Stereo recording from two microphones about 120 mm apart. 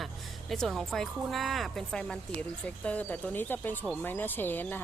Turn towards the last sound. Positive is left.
turn(degrees=15)  # may be behind; listen again after turning